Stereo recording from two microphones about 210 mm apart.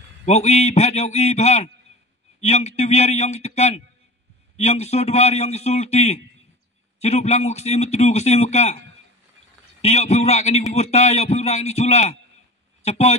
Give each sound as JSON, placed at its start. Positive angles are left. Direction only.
{"t": 0.2, "sound": "a man's voice", "side_deg": 30}